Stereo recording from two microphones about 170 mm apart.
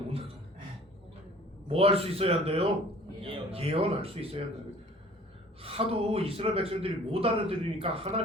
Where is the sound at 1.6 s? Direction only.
35° right (ahead or behind).